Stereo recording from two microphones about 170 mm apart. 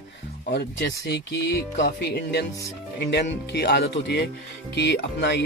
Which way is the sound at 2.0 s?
80° left.